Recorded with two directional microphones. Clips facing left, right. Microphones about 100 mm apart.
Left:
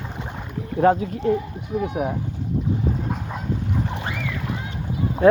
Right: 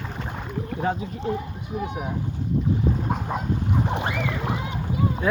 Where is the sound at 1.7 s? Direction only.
20° right (ahead or behind).